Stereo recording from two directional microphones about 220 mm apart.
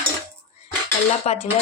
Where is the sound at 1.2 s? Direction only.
30° left (ahead or behind).